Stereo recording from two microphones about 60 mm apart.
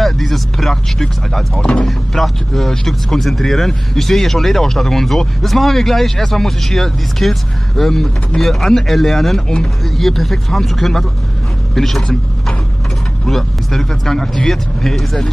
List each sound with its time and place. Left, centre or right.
0.0 s a sound: centre
1.6 s speech: centre
1.9 s speech: centre